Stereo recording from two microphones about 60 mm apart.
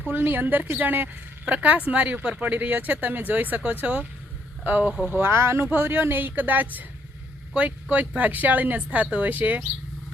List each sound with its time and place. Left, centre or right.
0.1 s a woman's voice: right
5.3 s speech: right
5.7 s a woman's voice: right